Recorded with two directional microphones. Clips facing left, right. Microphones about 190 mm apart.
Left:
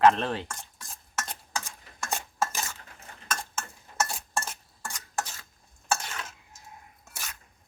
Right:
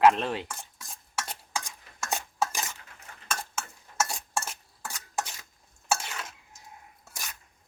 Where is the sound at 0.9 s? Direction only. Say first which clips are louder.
Even; 10° right (ahead or behind).